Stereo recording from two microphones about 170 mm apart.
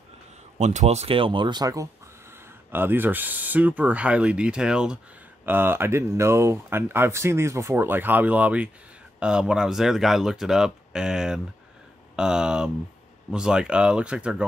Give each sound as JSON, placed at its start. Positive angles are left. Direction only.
{"t": 0.6, "sound": "speech", "side_deg": -40}